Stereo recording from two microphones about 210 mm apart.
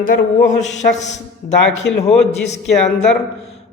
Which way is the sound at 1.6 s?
60° left (ahead or behind).